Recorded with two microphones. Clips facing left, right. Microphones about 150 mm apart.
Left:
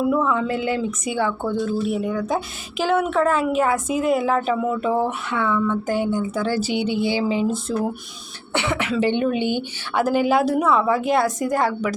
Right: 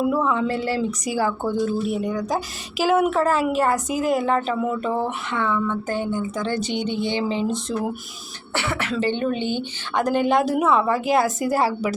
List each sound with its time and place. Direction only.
0.0 s a woman's voice: 5° right (ahead or behind)
8.5 s a woman's voice: 20° left (ahead or behind); by 11.9 s 5° right (ahead or behind)